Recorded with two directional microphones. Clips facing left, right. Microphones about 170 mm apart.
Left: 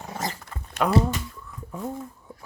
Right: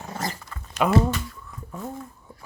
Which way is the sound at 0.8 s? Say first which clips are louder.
Right 1 dB; 5° right (ahead or behind).